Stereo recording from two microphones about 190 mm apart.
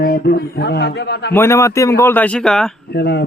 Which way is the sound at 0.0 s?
55° left (ahead or behind).